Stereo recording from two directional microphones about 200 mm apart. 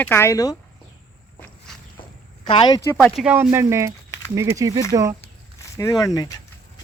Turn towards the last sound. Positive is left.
turn(degrees=15)  # may be behind; listen again after turning